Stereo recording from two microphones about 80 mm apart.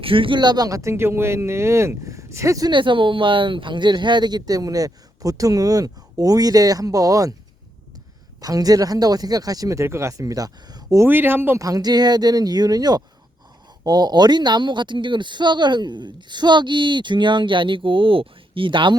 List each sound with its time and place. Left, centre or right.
0.0 s speech: right
2.6 s speech: right
8.4 s speech: right
11.0 s speech: right
11.6 s speech: right